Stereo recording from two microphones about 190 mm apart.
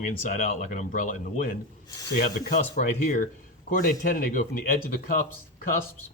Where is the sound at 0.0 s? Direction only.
40° left (ahead or behind).